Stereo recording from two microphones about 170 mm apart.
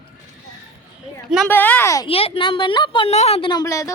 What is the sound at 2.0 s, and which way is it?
A woman's voice, 35° left (ahead or behind).